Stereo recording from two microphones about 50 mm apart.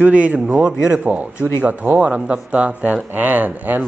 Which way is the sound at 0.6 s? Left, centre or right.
Centre.